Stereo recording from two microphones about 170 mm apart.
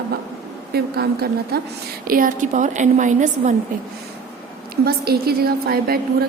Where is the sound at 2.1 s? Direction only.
55° right (ahead or behind).